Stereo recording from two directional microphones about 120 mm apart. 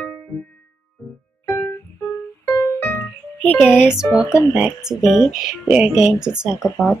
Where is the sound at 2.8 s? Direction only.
15° left (ahead or behind).